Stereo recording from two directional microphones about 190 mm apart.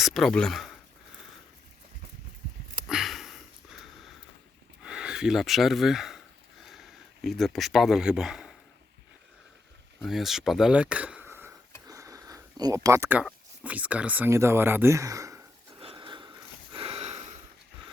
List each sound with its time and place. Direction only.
0.0 s speech: centre (ahead or behind)
2.8 s sniff: centre (ahead or behind)
4.8 s a sound: 5° right (ahead or behind)
10.0 s speech: centre (ahead or behind); by 15.4 s 15° right (ahead or behind)
15.8 s a sound: 25° right (ahead or behind)
16.7 s sniff: 30° right (ahead or behind)